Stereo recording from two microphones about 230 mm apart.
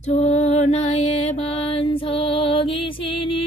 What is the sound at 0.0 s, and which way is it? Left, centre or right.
Mantra, left.